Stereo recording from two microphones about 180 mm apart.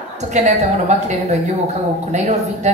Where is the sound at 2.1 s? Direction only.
40° right (ahead or behind).